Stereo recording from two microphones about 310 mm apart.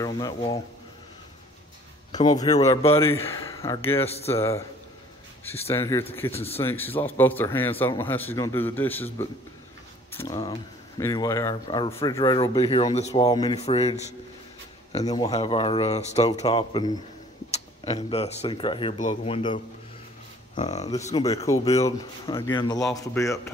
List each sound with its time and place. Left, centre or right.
0.0 s speech: centre
2.1 s speech: centre
4.0 s speech: centre
4.4 s speech: centre
5.7 s speech: centre
6.3 s speech: centre
6.6 s speech: centre